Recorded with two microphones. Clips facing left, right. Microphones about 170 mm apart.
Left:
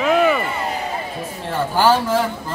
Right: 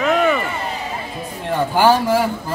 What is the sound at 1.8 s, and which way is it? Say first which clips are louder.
Speech: right 1 dB; 10° right (ahead or behind).